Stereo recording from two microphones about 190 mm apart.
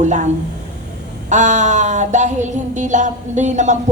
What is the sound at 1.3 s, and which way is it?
Child singing, 40° right (ahead or behind).